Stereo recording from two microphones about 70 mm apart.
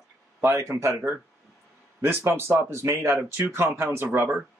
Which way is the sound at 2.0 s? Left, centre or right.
Right.